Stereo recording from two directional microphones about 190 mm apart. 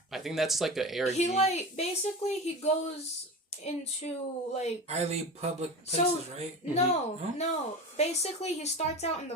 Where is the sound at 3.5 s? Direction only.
35° left (ahead or behind).